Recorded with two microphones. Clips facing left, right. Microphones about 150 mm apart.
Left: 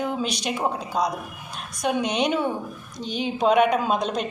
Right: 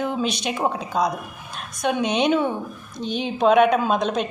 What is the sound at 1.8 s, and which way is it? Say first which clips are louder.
A woman's voice: right 2 dB; 55° right (ahead or behind).